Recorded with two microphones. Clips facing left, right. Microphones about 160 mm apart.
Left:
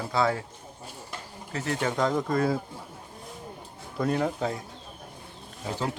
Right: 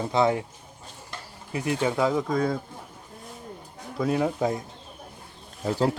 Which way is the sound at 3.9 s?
5° right (ahead or behind).